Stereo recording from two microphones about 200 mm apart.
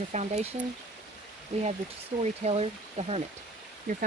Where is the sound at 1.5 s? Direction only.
30° right (ahead or behind).